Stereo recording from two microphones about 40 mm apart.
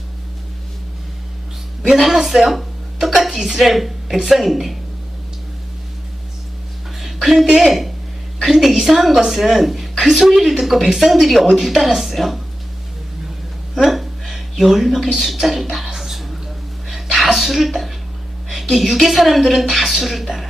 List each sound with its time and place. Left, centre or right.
1.8 s a woman's voice: centre
7.0 s a sound: centre
7.5 s a woman's voice: centre
13.8 s speech: centre
16.0 s a sound: centre
18.4 s a woman's voice: centre